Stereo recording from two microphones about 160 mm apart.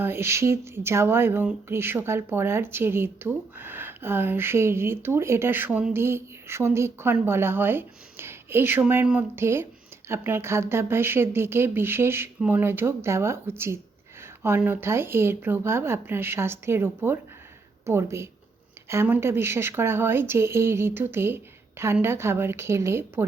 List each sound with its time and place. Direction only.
0.0 s speech: 15° right (ahead or behind)